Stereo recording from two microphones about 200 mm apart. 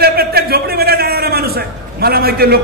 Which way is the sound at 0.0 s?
50° right (ahead or behind).